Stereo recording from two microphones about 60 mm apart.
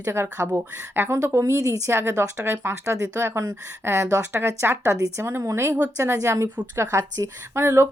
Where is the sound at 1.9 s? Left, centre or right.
Right.